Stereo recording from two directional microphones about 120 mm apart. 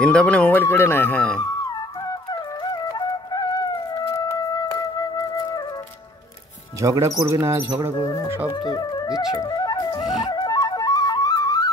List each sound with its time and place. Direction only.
0.0 s speech: 10° left (ahead or behind)
2.6 s flute: 35° left (ahead or behind)
4.1 s music: 30° left (ahead or behind)
6.8 s speech: 25° right (ahead or behind)
8.5 s music: 35° left (ahead or behind)
9.3 s flute: 30° left (ahead or behind)
10.2 s music: 35° left (ahead or behind)